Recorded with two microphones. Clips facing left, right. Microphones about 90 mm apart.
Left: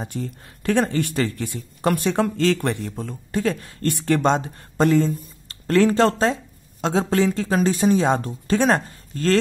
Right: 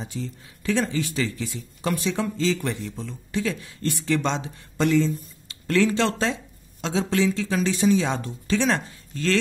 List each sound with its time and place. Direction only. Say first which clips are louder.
0.0 s speech: left 3 dB; 50° left (ahead or behind)